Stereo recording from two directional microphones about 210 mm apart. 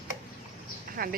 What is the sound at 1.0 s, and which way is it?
Speech, 45° right (ahead or behind).